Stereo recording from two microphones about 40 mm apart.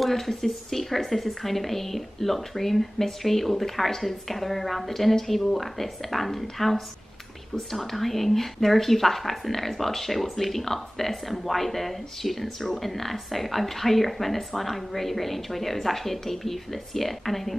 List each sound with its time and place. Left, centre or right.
0.0 s a woman's voice: centre
7.5 s a woman's voice: centre